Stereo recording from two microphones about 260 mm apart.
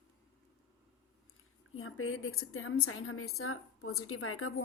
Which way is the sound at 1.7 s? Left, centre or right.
Left.